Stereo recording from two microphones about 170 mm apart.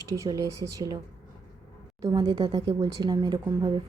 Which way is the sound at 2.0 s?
25° right (ahead or behind).